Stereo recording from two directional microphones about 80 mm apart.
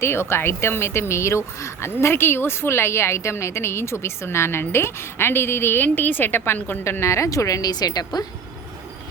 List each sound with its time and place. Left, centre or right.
0.0 s speech: left